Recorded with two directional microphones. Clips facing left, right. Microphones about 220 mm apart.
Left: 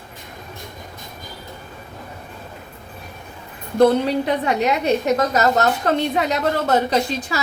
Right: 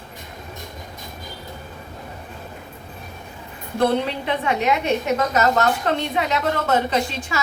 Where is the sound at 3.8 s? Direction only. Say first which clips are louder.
Left 5 dB; 40° left (ahead or behind).